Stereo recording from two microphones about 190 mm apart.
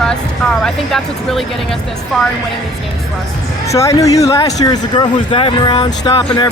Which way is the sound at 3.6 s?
15° left (ahead or behind).